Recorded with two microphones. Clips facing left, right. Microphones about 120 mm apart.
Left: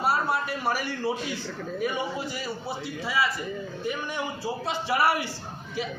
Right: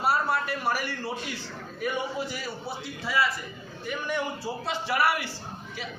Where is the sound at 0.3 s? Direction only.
20° left (ahead or behind).